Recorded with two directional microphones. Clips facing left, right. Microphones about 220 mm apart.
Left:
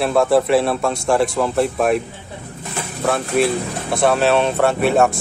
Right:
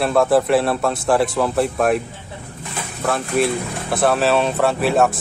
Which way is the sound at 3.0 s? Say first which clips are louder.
Left 2 dB; centre (ahead or behind).